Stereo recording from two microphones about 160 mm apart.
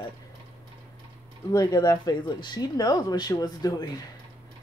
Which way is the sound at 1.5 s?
25° left (ahead or behind).